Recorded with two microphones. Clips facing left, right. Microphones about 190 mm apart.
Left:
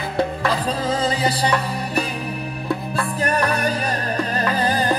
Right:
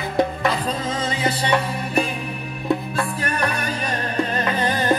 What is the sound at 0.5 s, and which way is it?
Music, 35° left (ahead or behind).